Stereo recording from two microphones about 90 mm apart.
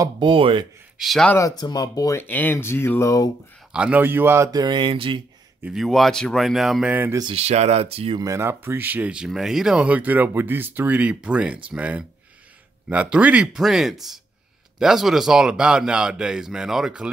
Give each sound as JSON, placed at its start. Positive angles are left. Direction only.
{"t": 0.2, "sound": "speech", "side_deg": -75}
{"t": 0.9, "sound": "speech", "side_deg": 0}
{"t": 1.4, "sound": "speech", "side_deg": 45}
{"t": 2.1, "sound": "speech", "side_deg": 20}
{"t": 3.7, "sound": "speech", "side_deg": -15}
{"t": 4.0, "sound": "speech", "side_deg": -25}
{"t": 4.5, "sound": "a sound", "side_deg": -50}
{"t": 5.7, "sound": "speech", "side_deg": 0}
{"t": 7.9, "sound": "speech", "side_deg": -90}
{"t": 8.2, "sound": "speech", "side_deg": -35}